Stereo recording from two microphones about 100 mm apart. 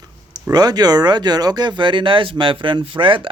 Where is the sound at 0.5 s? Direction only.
40° right (ahead or behind).